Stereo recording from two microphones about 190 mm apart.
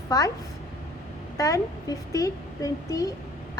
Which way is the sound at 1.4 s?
15° left (ahead or behind).